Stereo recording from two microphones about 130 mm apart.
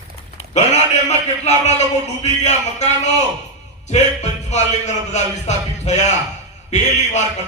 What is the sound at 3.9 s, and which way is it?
A man's voice, 60° left (ahead or behind).